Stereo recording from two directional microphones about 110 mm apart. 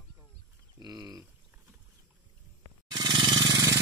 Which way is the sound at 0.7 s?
35° right (ahead or behind).